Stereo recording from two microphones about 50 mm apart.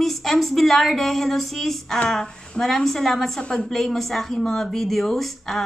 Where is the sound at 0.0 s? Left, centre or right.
Centre.